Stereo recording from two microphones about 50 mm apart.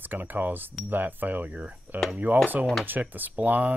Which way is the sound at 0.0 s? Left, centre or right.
Right.